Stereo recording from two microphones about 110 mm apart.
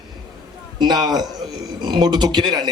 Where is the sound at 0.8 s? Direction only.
40° right (ahead or behind).